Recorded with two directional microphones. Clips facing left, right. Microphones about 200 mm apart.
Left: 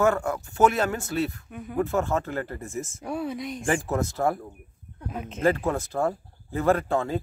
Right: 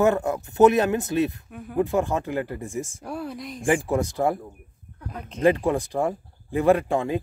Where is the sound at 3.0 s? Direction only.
Centre (ahead or behind).